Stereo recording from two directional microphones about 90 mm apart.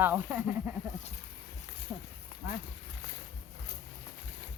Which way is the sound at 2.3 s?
70° left (ahead or behind).